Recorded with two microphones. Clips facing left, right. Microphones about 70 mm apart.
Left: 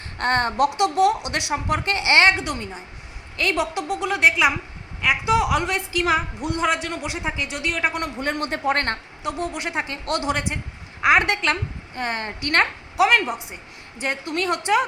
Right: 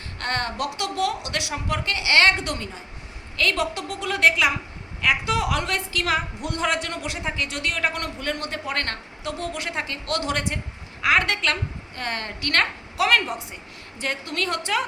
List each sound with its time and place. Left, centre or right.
0.2 s a woman's voice: left
2.3 s a woman's voice: centre
8.2 s a woman's voice: left
9.2 s a woman's voice: centre